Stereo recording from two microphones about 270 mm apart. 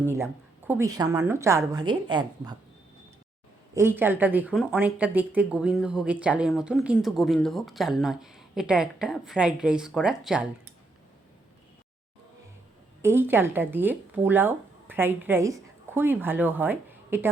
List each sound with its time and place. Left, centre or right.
0.7 s a woman's voice: centre
3.8 s speech: centre
13.0 s a woman's voice: centre